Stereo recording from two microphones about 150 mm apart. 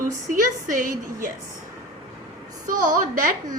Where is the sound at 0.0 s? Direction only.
60° right (ahead or behind).